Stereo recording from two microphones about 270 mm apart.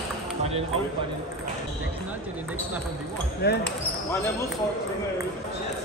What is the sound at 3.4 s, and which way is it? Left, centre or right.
Speech, left.